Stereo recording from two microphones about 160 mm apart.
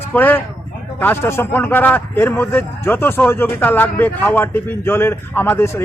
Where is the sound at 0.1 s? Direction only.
10° left (ahead or behind).